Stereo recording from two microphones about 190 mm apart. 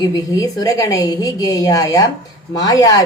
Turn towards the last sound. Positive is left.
turn(degrees=20)  # may be behind; listen again after turning